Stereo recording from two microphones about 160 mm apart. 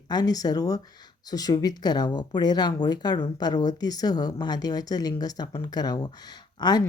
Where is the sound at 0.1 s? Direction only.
25° left (ahead or behind).